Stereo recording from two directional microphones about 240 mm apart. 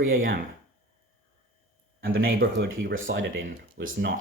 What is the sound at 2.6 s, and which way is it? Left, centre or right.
Speech, right.